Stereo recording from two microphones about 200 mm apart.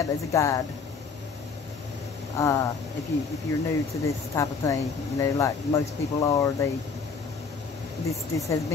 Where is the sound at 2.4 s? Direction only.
15° left (ahead or behind).